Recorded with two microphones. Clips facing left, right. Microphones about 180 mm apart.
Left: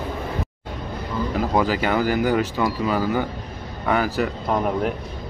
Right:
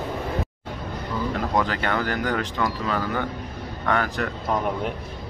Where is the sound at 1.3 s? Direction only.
5° left (ahead or behind).